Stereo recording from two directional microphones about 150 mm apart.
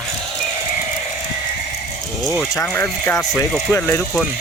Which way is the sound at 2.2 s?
5° right (ahead or behind).